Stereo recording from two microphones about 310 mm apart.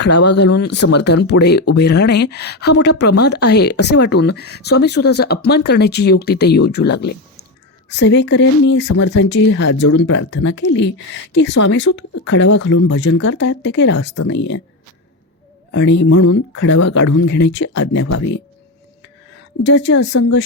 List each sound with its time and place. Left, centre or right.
0.0 s speech: left
15.7 s speech: left
19.3 s speech: left